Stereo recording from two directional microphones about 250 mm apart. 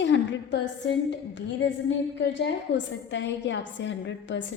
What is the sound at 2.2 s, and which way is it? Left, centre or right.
A woman's voice, left.